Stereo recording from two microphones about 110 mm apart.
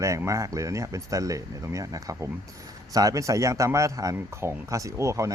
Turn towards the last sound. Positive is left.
turn(degrees=-30)  # may be behind; listen again after turning